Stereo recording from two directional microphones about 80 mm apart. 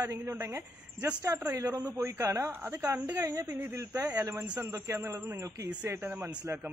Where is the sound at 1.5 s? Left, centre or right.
Right.